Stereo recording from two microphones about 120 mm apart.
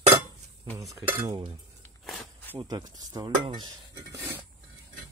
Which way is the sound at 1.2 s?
40° right (ahead or behind).